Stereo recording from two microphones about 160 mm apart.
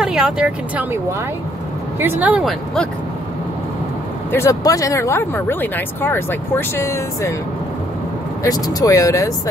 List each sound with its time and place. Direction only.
0.0 s speech: 5° right (ahead or behind)
2.0 s speech: 10° right (ahead or behind)
4.3 s speech: 20° left (ahead or behind)
8.5 s speech: 25° left (ahead or behind)